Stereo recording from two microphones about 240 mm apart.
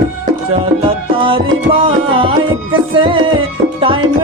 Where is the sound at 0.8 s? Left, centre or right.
Right.